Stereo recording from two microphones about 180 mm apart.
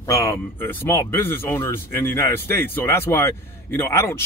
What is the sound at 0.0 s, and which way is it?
Speech, 15° left (ahead or behind).